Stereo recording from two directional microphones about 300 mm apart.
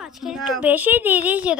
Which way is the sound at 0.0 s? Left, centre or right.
Centre.